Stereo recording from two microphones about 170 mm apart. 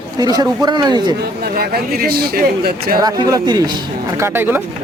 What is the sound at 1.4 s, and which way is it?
Speech, 65° right (ahead or behind).